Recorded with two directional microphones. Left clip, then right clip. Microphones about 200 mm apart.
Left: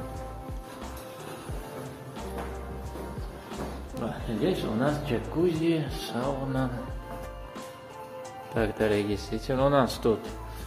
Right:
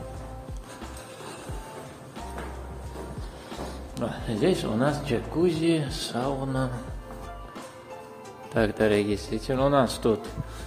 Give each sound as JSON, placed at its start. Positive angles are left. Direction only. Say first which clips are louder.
{"t": 3.9, "sound": "speech", "louder": "right 3 dB", "side_deg": -25}
{"t": 8.5, "sound": "speech", "louder": "right 3 dB", "side_deg": -20}